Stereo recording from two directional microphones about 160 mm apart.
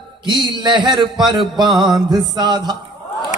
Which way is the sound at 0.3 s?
25° right (ahead or behind).